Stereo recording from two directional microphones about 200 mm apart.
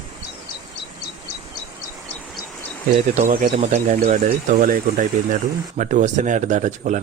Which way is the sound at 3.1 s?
40° right (ahead or behind).